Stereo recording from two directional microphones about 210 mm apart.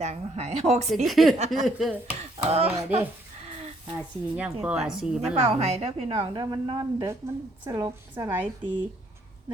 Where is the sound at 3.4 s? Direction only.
30° right (ahead or behind).